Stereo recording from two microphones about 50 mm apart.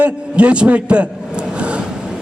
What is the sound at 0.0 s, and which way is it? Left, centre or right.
A man's voice, right.